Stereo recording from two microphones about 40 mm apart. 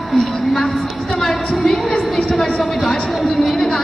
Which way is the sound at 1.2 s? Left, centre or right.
Centre.